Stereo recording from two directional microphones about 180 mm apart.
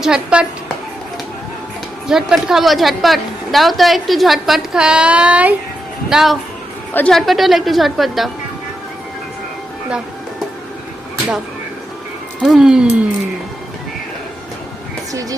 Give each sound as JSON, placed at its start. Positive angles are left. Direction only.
{"t": 0.0, "sound": "a woman's voice", "side_deg": -5}
{"t": 2.0, "sound": "a woman's voice", "side_deg": -5}
{"t": 12.4, "sound": "a woman's voice", "side_deg": 0}
{"t": 15.1, "sound": "speech", "side_deg": -20}